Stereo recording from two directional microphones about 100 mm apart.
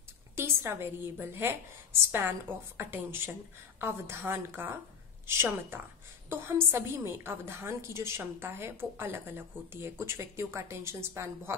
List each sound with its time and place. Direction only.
0.4 s a woman's voice: 25° right (ahead or behind)